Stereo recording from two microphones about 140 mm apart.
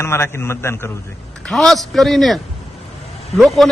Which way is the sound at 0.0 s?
20° left (ahead or behind).